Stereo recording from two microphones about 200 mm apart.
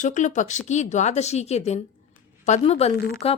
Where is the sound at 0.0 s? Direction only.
40° left (ahead or behind).